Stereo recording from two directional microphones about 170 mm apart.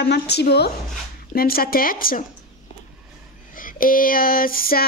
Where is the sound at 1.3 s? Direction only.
60° left (ahead or behind).